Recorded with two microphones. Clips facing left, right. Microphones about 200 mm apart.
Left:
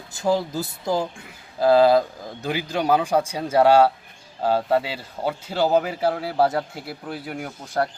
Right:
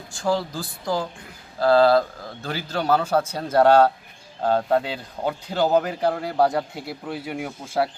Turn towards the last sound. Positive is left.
turn(degrees=-5)  # may be behind; listen again after turning